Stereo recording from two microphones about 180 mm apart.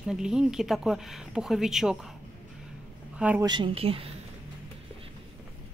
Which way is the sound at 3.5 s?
30° right (ahead or behind).